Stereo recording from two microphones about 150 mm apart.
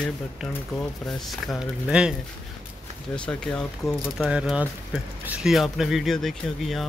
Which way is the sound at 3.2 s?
5° left (ahead or behind).